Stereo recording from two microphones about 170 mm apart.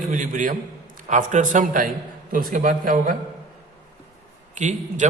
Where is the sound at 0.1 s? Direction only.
50° right (ahead or behind).